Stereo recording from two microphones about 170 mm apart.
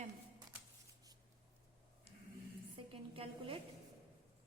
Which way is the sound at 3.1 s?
35° right (ahead or behind).